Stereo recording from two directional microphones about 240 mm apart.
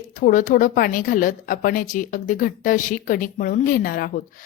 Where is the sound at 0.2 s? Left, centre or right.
Left.